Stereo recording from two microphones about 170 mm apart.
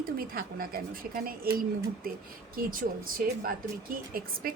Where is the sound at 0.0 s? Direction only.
60° right (ahead or behind).